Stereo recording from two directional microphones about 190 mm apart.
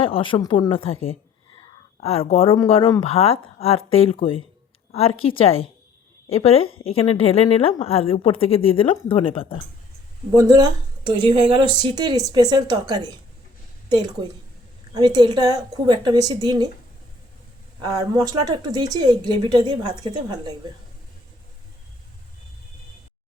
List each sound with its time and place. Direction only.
0.0 s speech: 30° left (ahead or behind)
2.0 s a woman's voice: 30° left (ahead or behind)
10.3 s a woman's voice: 15° right (ahead or behind)
17.7 s a woman's voice: 20° right (ahead or behind)